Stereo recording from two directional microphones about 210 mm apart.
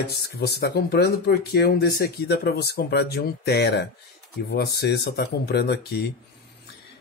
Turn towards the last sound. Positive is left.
turn(degrees=50)  # may be behind; listen again after turning